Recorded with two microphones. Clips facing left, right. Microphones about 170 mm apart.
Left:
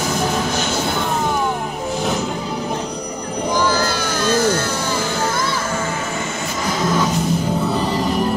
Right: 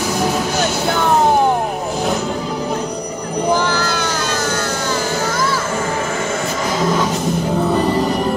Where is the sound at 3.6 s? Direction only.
60° right (ahead or behind).